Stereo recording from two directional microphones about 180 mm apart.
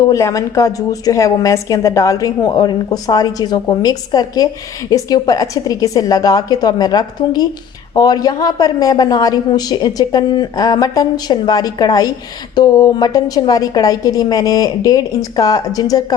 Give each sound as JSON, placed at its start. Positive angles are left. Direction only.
{"t": 0.1, "sound": "a woman's voice", "side_deg": 15}